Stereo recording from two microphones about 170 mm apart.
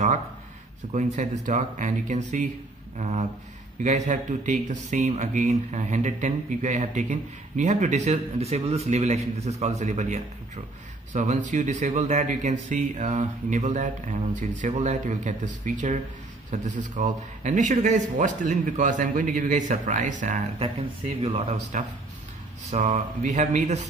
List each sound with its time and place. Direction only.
0.9 s speech: 45° right (ahead or behind)
21.2 s speech: 35° right (ahead or behind)